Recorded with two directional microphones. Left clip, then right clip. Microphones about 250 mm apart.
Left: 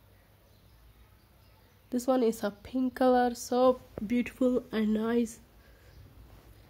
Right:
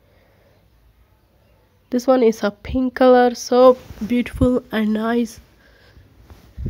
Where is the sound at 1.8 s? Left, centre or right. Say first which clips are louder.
Right 12 dB; centre.